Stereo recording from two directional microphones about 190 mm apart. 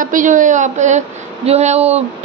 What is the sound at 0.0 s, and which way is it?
A woman's voice, 45° right (ahead or behind).